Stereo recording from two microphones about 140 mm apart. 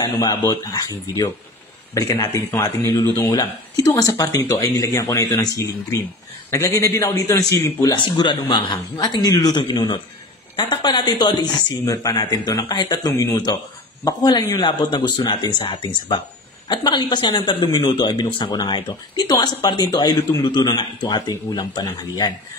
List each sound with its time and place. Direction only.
0.0 s speech: 30° left (ahead or behind)